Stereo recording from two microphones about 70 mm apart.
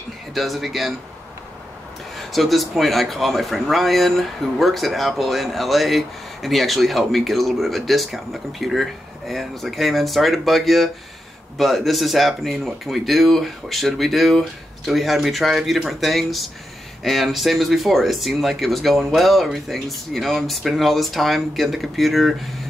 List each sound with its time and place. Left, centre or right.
0.3 s speech: centre
2.1 s speech: centre